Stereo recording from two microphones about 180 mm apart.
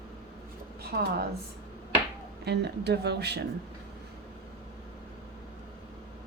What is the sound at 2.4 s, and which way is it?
Speech, 70° right (ahead or behind).